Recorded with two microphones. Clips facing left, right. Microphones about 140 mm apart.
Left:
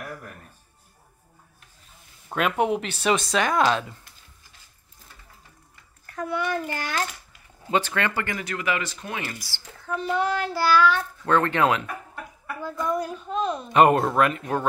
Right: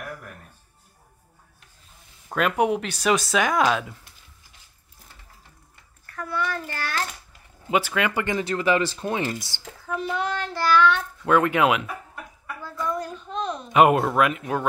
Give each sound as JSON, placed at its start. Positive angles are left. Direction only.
{"t": 2.2, "sound": "speech", "side_deg": 0}
{"t": 6.0, "sound": "a child's voice", "side_deg": 20}
{"t": 7.7, "sound": "speech", "side_deg": -10}
{"t": 9.9, "sound": "speech", "side_deg": 0}
{"t": 11.2, "sound": "speech", "side_deg": -10}
{"t": 12.8, "sound": "speech", "side_deg": 10}